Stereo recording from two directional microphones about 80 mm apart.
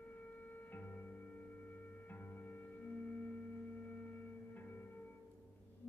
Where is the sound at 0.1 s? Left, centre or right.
Left.